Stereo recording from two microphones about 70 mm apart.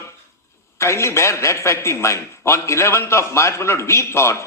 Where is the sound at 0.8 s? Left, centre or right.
Left.